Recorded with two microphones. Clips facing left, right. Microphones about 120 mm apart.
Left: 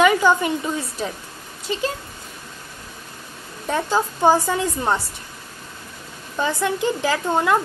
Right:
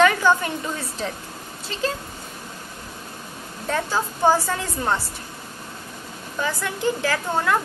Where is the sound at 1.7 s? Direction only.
15° left (ahead or behind).